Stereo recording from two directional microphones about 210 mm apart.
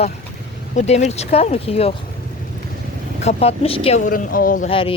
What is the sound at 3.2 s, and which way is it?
Speech, 30° left (ahead or behind).